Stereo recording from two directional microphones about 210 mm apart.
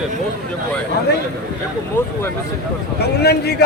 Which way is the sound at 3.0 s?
50° left (ahead or behind).